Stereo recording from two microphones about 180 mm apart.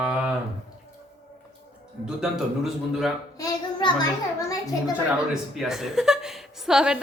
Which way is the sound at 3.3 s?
20° left (ahead or behind).